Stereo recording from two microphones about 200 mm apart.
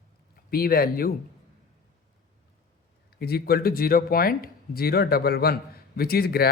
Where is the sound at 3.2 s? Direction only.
50° left (ahead or behind).